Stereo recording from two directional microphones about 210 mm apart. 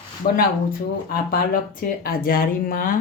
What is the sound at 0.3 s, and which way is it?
Speech, 45° left (ahead or behind).